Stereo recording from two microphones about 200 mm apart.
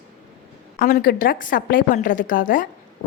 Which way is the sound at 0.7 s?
45° left (ahead or behind).